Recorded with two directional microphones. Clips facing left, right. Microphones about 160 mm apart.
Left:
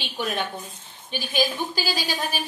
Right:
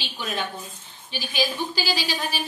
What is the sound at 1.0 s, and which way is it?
A woman's voice, 50° left (ahead or behind).